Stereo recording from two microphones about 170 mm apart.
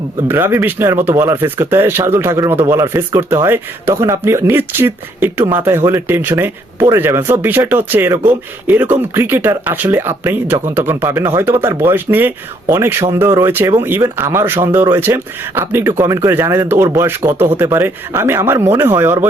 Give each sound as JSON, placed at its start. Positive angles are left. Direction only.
{"t": 0.3, "sound": "speech", "side_deg": -15}